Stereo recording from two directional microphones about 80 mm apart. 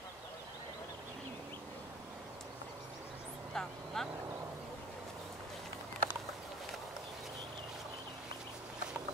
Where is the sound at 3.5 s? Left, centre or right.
Centre.